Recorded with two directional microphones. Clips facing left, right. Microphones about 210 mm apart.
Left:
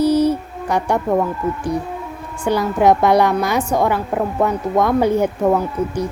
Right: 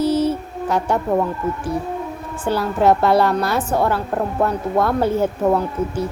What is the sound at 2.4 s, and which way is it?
A woman's voice, 15° left (ahead or behind).